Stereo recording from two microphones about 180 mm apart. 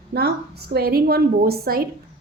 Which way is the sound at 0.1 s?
65° right (ahead or behind).